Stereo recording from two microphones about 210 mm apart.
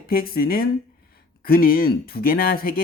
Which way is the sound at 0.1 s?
45° left (ahead or behind).